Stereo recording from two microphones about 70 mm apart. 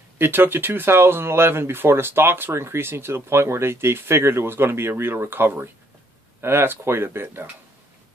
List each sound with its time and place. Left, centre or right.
0.2 s speech: right